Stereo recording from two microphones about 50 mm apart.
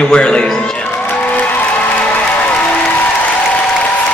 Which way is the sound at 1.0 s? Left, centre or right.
Left.